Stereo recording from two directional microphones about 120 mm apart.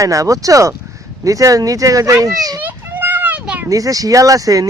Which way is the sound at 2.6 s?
15° right (ahead or behind).